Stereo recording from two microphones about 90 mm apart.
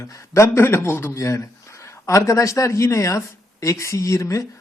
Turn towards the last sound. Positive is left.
turn(degrees=35)  # may be behind; listen again after turning